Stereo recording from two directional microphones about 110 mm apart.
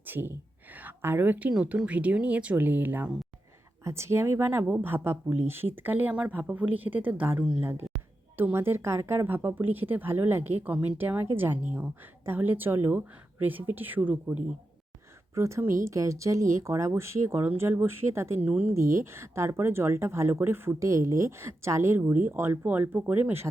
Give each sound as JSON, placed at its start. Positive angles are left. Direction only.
{"t": 0.0, "sound": "a woman's voice", "side_deg": -20}
{"t": 15.4, "sound": "speech", "side_deg": -25}
{"t": 18.4, "sound": "a woman's voice", "side_deg": -10}
{"t": 18.7, "sound": "speech", "side_deg": -25}